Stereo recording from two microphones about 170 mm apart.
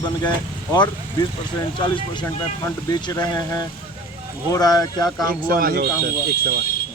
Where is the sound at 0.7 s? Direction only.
25° left (ahead or behind).